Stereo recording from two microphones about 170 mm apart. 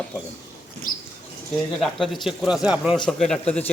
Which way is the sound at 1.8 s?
Centre (ahead or behind).